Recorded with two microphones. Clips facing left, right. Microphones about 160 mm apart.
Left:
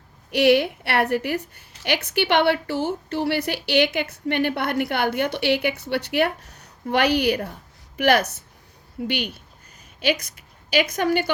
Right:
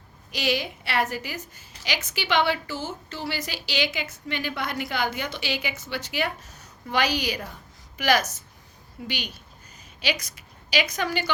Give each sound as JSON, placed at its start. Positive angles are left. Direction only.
{"t": 0.3, "sound": "a woman's voice", "side_deg": 65}